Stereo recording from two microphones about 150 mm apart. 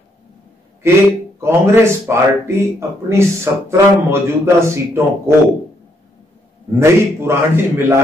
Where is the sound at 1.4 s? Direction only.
15° right (ahead or behind).